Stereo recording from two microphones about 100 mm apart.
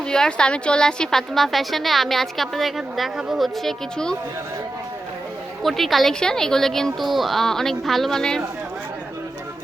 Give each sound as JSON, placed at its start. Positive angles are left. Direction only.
{"t": 0.1, "sound": "a woman's voice", "side_deg": 5}
{"t": 5.6, "sound": "a woman's voice", "side_deg": 0}